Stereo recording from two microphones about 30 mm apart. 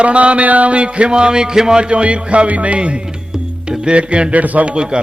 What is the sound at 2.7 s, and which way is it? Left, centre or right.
Music, right.